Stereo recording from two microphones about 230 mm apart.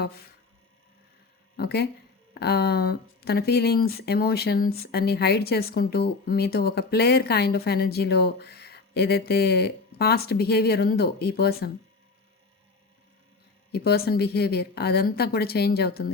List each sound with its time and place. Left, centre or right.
1.5 s speech: left
13.7 s speech: left